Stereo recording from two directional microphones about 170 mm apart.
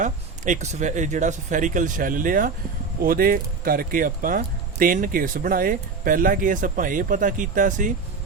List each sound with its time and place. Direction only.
0.0 s speech: 45° right (ahead or behind)